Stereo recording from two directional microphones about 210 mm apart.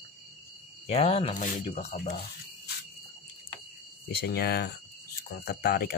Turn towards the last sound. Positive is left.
turn(degrees=45)  # may be behind; listen again after turning